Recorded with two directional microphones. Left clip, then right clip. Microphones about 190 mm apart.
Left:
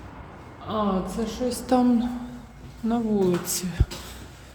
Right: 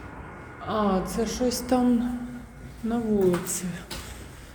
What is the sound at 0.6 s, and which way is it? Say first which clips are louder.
A woman's voice: right 1 dB; 25° left (ahead or behind).